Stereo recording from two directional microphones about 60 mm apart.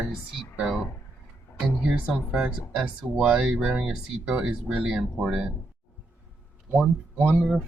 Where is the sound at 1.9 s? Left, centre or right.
Centre.